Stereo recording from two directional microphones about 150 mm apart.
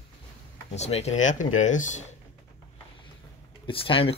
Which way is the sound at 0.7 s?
45° left (ahead or behind).